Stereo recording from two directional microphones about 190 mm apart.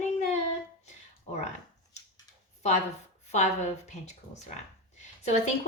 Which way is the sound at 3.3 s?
35° left (ahead or behind).